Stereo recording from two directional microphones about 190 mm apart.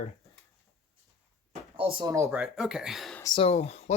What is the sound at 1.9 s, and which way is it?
Speech, 20° right (ahead or behind).